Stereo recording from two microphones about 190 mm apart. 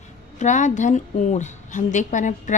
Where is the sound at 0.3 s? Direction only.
40° left (ahead or behind).